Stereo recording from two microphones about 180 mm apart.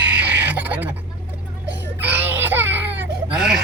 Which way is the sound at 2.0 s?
10° right (ahead or behind).